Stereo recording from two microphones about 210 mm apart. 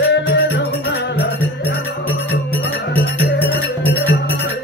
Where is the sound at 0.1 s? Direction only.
55° left (ahead or behind).